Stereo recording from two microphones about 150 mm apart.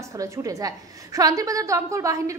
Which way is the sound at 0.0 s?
20° right (ahead or behind).